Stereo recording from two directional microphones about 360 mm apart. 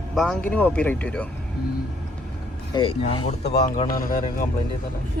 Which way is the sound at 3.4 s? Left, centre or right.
Left.